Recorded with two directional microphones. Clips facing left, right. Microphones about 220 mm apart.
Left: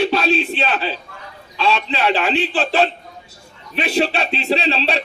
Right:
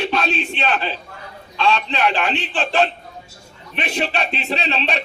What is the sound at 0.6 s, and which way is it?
A man's voice, 5° left (ahead or behind).